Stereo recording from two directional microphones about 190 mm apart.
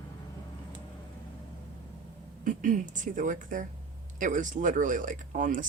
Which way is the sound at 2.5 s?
45° right (ahead or behind).